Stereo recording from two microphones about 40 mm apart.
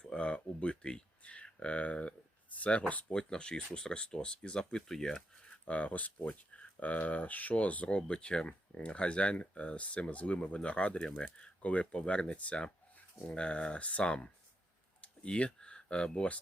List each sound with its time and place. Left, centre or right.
0.0 s speech: left
1.2 s a sound: left
1.5 s speech: left
3.1 s speech: left
5.6 s speech: left